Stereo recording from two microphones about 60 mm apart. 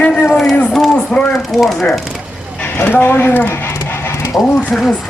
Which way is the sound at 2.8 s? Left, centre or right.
Left.